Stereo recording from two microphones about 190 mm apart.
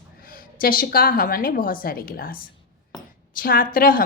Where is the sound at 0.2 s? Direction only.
50° left (ahead or behind).